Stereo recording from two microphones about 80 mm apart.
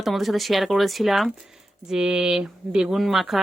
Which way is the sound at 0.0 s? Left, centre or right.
Centre.